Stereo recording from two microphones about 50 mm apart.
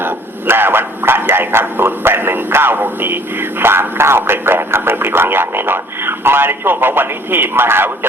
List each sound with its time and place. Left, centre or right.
0.0 s speech: right